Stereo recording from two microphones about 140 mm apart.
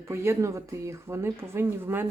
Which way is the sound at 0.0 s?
20° right (ahead or behind).